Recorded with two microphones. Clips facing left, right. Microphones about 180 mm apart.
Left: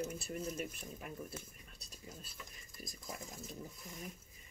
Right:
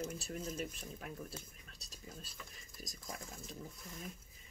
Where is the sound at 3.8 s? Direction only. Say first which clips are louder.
Even; 15° left (ahead or behind).